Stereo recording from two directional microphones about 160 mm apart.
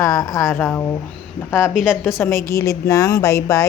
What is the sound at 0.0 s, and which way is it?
A woman's voice, 20° left (ahead or behind).